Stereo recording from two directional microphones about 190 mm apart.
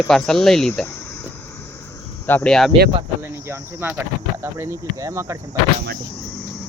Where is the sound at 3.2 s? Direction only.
10° right (ahead or behind).